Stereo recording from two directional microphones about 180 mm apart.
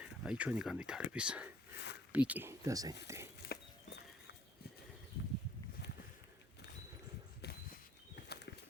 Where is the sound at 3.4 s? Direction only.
60° left (ahead or behind).